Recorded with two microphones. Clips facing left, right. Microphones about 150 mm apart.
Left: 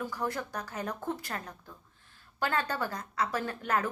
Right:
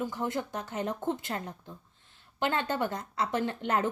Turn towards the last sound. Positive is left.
turn(degrees=-25)  # may be behind; listen again after turning